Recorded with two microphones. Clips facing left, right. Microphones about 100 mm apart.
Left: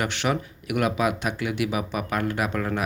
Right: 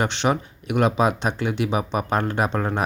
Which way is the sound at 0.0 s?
25° right (ahead or behind).